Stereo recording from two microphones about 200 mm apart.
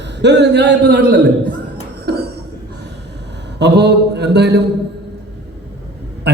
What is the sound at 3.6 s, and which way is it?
A man's voice, 55° right (ahead or behind).